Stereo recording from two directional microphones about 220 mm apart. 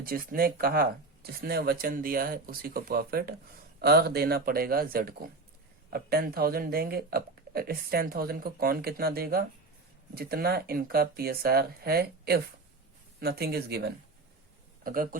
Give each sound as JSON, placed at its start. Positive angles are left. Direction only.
{"t": 0.0, "sound": "a man's voice", "side_deg": -40}